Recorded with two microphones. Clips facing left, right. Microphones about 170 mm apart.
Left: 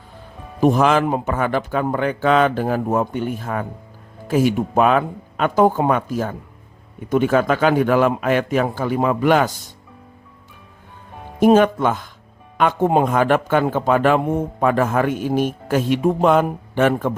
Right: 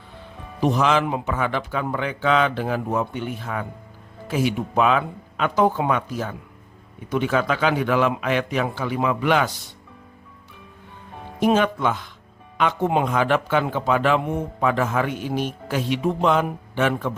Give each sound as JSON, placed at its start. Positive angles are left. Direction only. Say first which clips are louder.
{"t": 0.6, "sound": "a man's voice", "louder": "left 4 dB", "side_deg": 50}
{"t": 11.3, "sound": "a man's voice", "louder": "left 6 dB", "side_deg": 45}